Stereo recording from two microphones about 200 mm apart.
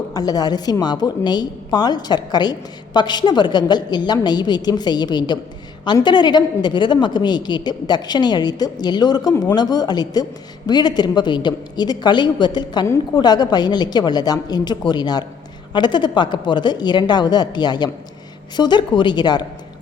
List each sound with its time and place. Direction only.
0.1 s a woman's voice: 20° left (ahead or behind)